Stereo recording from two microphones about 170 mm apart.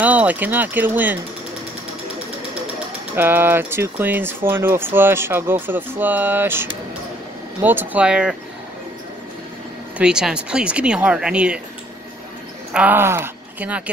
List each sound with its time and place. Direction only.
0.0 s speech: 10° right (ahead or behind)
3.2 s speech: 10° right (ahead or behind)
9.9 s speech: 5° right (ahead or behind)
12.7 s speech: 10° right (ahead or behind)